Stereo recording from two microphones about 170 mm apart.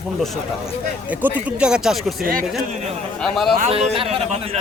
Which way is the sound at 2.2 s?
55° right (ahead or behind).